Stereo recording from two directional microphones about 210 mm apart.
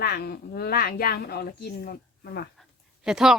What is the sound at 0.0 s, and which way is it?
Speech, 50° left (ahead or behind).